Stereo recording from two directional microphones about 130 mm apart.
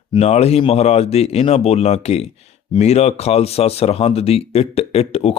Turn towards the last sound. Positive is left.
turn(degrees=50)  # may be behind; listen again after turning